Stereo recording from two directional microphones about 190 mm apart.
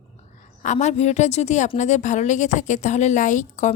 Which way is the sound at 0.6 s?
40° left (ahead or behind).